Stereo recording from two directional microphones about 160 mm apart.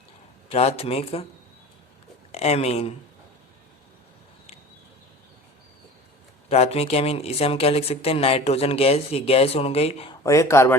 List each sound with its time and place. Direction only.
0.4 s speech: 40° left (ahead or behind)
2.3 s speech: 40° left (ahead or behind)
6.5 s speech: 40° left (ahead or behind)
10.1 s speech: 20° left (ahead or behind)